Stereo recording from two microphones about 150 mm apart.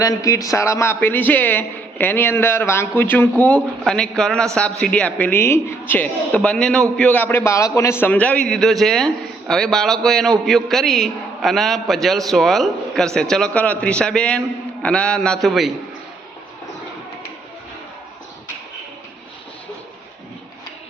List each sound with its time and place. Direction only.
0.0 s a man's voice: 25° left (ahead or behind); by 15.7 s centre (ahead or behind)